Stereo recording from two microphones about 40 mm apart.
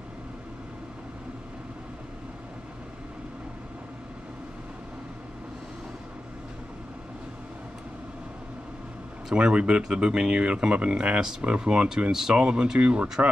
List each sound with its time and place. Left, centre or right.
9.3 s speech: right
12.1 s speech: centre; by 13.1 s right